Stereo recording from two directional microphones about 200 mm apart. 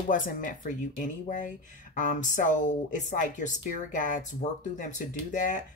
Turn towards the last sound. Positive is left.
turn(degrees=40)  # may be behind; listen again after turning